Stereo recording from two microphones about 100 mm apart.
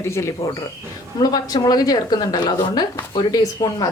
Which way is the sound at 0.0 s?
30° left (ahead or behind).